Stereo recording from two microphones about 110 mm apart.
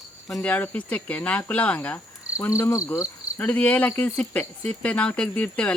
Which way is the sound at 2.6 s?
25° left (ahead or behind).